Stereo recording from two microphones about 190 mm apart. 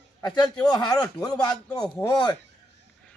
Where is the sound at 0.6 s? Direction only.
20° left (ahead or behind).